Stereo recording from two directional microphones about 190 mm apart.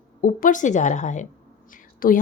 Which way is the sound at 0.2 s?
45° left (ahead or behind).